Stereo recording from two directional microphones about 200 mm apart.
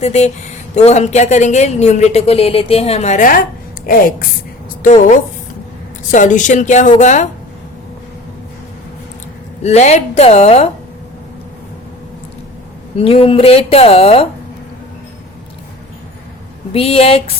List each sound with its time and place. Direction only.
0.0 s a woman's voice: 35° left (ahead or behind)
9.6 s a woman's voice: 35° left (ahead or behind)
13.0 s speech: 30° left (ahead or behind)
16.7 s speech: 30° left (ahead or behind)